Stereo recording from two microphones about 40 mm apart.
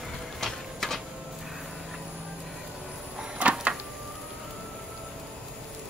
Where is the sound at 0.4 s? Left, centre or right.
Centre.